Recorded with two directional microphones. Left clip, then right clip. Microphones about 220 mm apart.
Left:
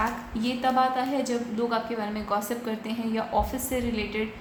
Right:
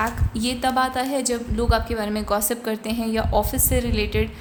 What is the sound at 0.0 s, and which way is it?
A woman's voice, 45° right (ahead or behind).